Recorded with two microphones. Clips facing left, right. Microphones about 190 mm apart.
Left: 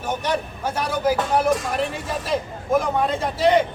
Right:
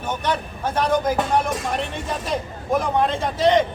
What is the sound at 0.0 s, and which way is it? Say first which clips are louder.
A man's voice: even; 10° left (ahead or behind).